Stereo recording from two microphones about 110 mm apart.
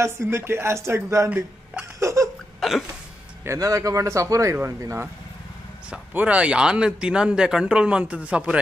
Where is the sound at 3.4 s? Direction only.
30° right (ahead or behind).